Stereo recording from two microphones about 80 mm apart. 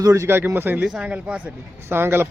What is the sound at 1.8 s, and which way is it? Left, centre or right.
Speech, right.